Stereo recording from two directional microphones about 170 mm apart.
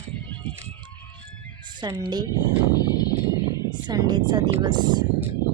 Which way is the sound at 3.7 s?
25° right (ahead or behind).